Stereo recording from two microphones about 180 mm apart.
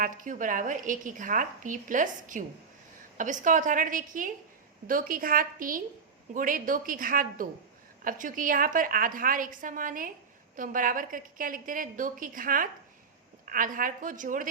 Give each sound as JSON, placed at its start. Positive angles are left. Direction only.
{"t": 0.0, "sound": "a woman's voice", "side_deg": -45}